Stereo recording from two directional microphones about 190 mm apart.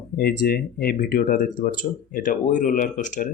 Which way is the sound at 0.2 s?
55° left (ahead or behind).